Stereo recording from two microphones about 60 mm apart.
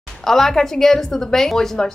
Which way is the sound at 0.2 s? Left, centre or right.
Centre.